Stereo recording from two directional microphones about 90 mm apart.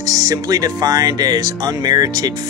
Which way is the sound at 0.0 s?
40° right (ahead or behind).